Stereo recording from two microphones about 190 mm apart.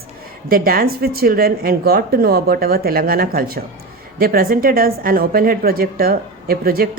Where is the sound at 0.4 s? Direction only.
50° right (ahead or behind).